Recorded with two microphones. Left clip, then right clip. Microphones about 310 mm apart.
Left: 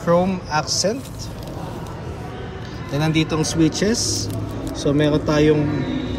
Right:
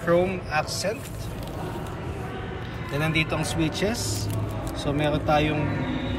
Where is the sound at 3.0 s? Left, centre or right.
Centre.